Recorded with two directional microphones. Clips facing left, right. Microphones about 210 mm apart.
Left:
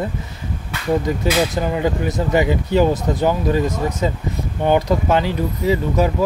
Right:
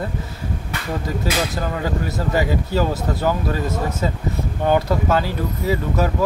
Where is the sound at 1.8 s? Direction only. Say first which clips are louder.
Left 4 dB; 20° left (ahead or behind).